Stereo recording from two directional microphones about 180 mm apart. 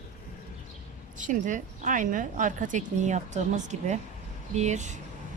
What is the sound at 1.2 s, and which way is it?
A woman's voice, 45° right (ahead or behind).